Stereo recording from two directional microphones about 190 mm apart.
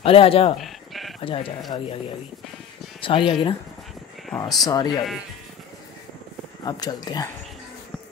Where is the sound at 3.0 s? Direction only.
25° left (ahead or behind).